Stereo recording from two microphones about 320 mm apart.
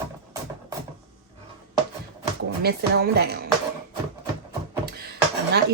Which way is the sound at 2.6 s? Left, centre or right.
Right.